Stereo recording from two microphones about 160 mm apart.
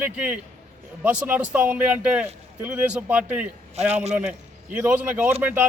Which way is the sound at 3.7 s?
40° right (ahead or behind).